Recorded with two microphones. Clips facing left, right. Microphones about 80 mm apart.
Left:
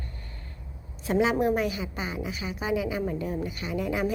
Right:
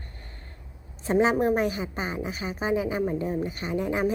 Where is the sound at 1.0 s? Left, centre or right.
Right.